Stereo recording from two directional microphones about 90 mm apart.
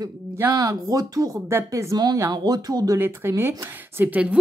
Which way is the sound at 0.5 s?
40° right (ahead or behind).